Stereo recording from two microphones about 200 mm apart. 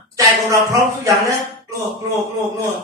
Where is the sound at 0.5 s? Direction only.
15° right (ahead or behind).